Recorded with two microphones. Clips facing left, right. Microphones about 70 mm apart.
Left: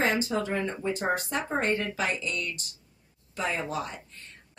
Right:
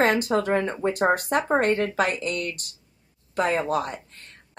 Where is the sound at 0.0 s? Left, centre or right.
Right.